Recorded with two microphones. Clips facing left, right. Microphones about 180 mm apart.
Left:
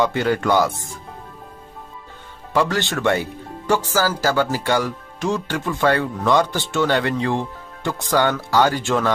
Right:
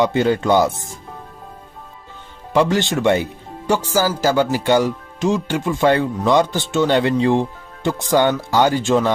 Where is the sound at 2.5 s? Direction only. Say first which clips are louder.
Right 4 dB; 20° right (ahead or behind).